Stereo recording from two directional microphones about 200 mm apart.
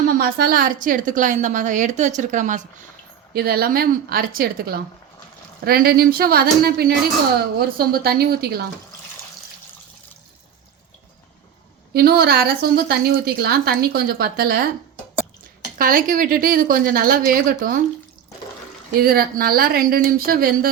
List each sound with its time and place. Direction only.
0.1 s a woman's voice: 45° right (ahead or behind)
3.3 s a woman's voice: 50° right (ahead or behind)
11.9 s a woman's voice: 50° right (ahead or behind)
15.8 s a woman's voice: 45° right (ahead or behind)
18.9 s a woman's voice: 50° right (ahead or behind)